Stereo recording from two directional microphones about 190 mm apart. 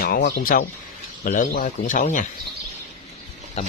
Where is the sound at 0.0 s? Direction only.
50° left (ahead or behind).